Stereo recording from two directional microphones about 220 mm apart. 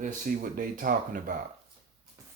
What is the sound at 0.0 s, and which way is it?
Speech, 40° right (ahead or behind).